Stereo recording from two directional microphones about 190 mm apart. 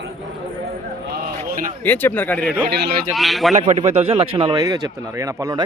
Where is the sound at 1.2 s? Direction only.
50° right (ahead or behind).